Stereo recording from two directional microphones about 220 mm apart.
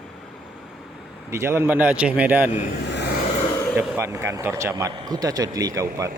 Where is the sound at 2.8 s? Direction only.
50° left (ahead or behind).